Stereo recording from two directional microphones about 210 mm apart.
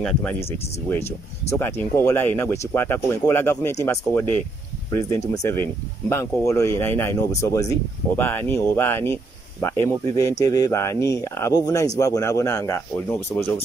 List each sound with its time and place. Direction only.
0.0 s speech: 5° left (ahead or behind)